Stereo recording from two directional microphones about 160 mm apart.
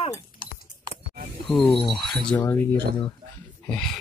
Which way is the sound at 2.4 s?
15° left (ahead or behind).